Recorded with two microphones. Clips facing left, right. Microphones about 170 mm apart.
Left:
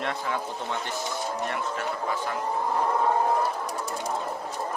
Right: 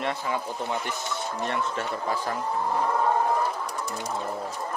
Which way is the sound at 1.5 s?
30° right (ahead or behind).